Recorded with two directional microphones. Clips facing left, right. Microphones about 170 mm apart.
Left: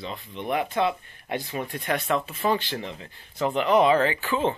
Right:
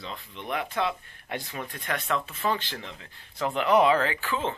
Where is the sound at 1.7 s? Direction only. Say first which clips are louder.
Left 4 dB; 25° left (ahead or behind).